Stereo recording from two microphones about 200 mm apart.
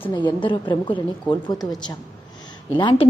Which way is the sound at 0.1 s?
20° left (ahead or behind).